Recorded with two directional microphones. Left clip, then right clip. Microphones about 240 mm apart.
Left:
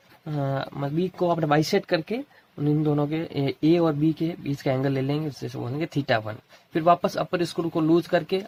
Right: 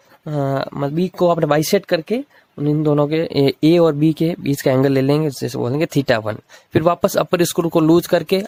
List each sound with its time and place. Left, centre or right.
0.3 s speech: right